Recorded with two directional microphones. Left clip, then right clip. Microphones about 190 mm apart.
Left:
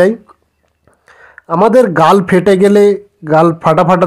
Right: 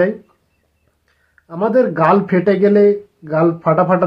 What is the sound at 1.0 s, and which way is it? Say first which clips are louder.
A man's voice: left 18 dB; 35° left (ahead or behind).